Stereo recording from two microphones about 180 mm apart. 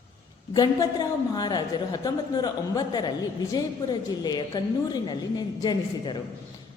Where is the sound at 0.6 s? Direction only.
20° left (ahead or behind).